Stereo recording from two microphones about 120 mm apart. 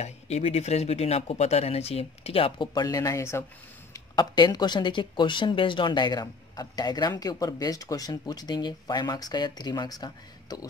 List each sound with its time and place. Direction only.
0.0 s speech: 60° left (ahead or behind)
2.7 s speech: 30° left (ahead or behind)
3.9 s speech: 40° left (ahead or behind)